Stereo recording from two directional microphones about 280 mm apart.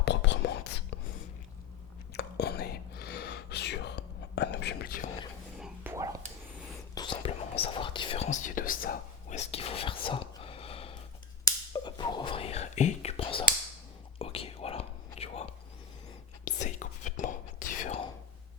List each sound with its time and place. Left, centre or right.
0.0 s whispering: left
2.1 s whispering: left
5.5 s whispering: centre
6.9 s whispering: centre